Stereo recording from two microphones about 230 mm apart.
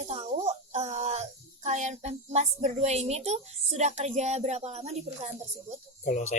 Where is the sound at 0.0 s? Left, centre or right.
Right.